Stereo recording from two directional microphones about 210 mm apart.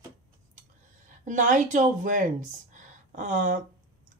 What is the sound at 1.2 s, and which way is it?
Speech, 35° right (ahead or behind).